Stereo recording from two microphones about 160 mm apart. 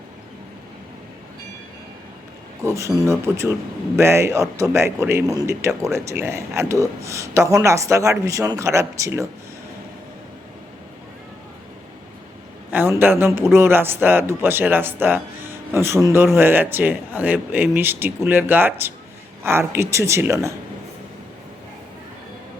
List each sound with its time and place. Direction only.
2.6 s speech: 20° right (ahead or behind)
12.7 s speech: 15° right (ahead or behind)